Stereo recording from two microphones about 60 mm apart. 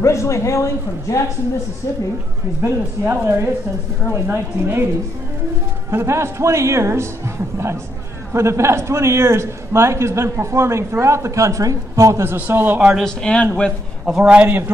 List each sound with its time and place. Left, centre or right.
0.0 s speech: left
2.6 s a man's voice: right
5.9 s a man's voice: right
8.3 s a man's voice: right
12.4 s a man's voice: right
13.0 s speech: centre
14.0 s a man's voice: centre
14.3 s a man's voice: right